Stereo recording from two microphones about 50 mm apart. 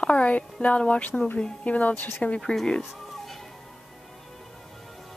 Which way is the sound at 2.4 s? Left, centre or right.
Centre.